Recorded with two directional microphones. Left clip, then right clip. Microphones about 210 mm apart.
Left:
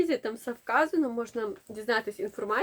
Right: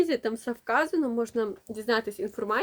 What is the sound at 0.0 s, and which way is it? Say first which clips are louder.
Speech: right 2 dB; 30° right (ahead or behind).